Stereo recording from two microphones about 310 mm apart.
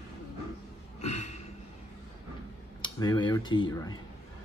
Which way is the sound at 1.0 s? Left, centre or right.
Left.